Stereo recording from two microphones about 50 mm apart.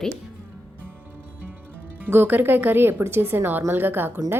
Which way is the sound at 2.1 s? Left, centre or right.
Right.